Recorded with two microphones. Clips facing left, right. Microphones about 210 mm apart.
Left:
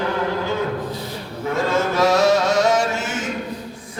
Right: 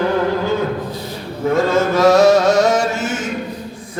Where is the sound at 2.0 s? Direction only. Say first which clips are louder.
Right 6 dB; 40° right (ahead or behind).